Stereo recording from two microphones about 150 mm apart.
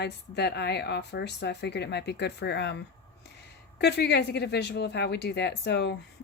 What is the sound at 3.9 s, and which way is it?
Speech, 90° left.